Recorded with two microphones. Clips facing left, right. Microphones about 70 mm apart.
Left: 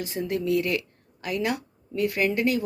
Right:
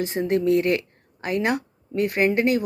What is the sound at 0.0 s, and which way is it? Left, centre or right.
Speech, right.